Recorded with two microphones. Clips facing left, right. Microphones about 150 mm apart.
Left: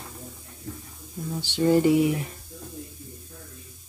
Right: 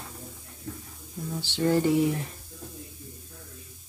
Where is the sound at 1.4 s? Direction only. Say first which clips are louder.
Left 4 dB; 15° left (ahead or behind).